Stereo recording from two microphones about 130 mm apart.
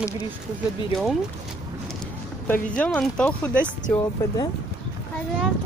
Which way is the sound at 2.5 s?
10° left (ahead or behind).